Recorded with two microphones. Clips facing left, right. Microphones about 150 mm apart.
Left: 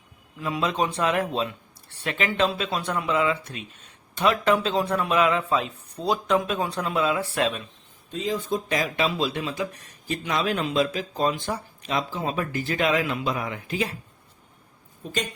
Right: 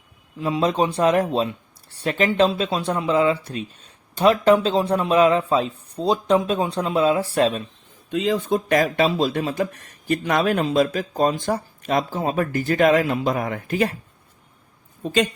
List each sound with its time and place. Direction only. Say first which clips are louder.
0.3 s speech: right 5 dB; 30° right (ahead or behind)
8.1 s speech: right 6 dB; 70° right (ahead or behind); by 9.0 s 50° right (ahead or behind)
9.0 s speech: right 5 dB; 40° right (ahead or behind)